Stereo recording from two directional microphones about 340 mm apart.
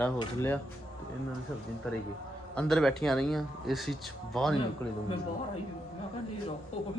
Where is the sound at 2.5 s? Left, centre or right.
Centre.